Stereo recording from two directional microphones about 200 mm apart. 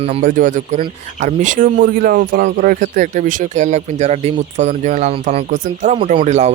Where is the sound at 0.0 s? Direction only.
35° right (ahead or behind).